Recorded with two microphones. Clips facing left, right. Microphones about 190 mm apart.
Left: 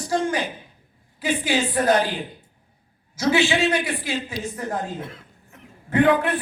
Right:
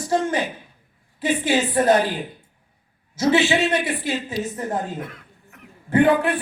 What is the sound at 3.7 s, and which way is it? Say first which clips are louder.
Speech: right 2 dB; 25° right (ahead or behind).